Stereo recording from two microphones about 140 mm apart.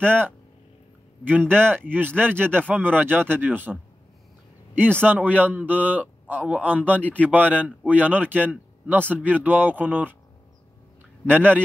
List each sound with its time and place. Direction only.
1.2 s a man's voice: 15° right (ahead or behind)
5.0 s a man's voice: 10° right (ahead or behind)
11.2 s a man's voice: 15° right (ahead or behind)